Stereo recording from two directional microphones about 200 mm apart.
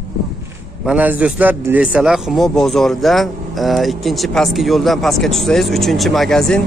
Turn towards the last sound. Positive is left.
turn(degrees=0)  # may be behind; listen again after turning